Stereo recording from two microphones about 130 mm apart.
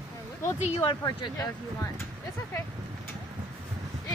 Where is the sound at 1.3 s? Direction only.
25° left (ahead or behind).